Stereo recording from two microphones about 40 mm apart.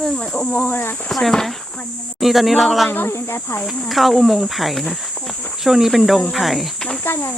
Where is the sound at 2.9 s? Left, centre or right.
Left.